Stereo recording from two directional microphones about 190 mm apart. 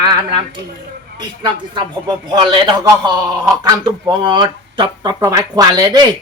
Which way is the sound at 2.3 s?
25° right (ahead or behind).